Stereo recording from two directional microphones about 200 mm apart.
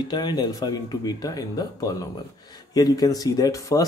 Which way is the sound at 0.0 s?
20° left (ahead or behind).